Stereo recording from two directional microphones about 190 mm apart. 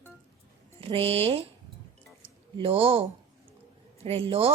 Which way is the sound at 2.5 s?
30° right (ahead or behind).